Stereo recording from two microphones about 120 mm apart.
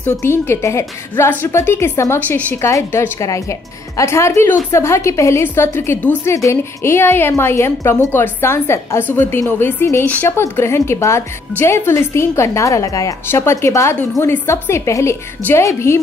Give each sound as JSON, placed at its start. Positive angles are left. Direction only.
{"t": 0.0, "sound": "a woman's voice", "side_deg": 20}